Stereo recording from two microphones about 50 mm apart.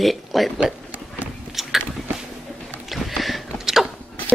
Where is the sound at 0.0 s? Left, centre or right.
Centre.